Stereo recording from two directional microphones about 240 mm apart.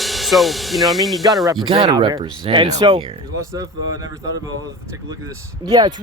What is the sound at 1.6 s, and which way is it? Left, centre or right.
Speech, centre.